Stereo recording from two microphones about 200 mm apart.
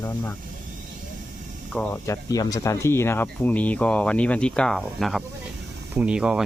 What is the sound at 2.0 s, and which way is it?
Speech, 15° left (ahead or behind).